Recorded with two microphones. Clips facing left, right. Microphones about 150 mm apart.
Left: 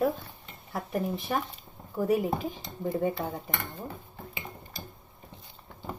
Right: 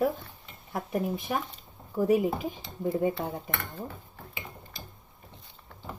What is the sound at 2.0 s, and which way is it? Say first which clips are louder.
Speech: right 2 dB; 10° right (ahead or behind).